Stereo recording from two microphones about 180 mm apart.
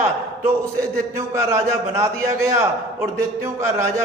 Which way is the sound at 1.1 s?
15° right (ahead or behind).